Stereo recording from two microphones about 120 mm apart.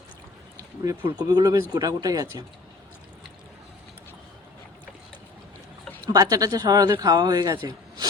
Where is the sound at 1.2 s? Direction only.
30° right (ahead or behind).